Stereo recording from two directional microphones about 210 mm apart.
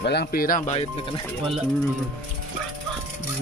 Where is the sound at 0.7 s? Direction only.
25° left (ahead or behind).